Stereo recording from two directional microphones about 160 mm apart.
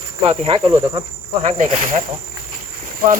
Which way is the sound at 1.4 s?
50° right (ahead or behind).